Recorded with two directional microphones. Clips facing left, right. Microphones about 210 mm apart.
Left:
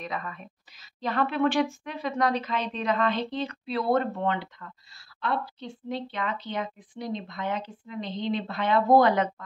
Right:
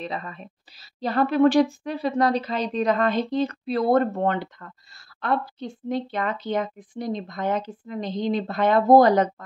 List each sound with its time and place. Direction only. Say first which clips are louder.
0.0 s a woman's voice: right 3 dB; 30° right (ahead or behind)